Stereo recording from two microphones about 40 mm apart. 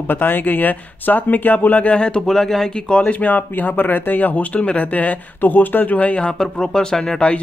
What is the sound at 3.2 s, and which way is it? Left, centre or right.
Speech, left.